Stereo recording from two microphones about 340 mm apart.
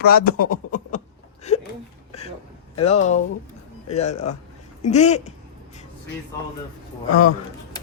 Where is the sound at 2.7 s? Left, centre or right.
Centre.